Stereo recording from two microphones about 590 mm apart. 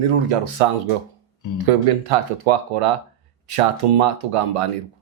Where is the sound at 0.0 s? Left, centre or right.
Right.